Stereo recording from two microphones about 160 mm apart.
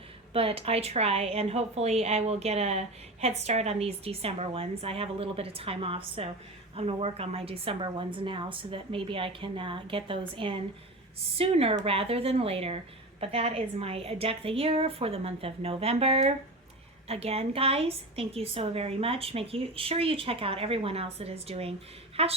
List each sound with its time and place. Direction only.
0.3 s a woman's voice: 35° right (ahead or behind)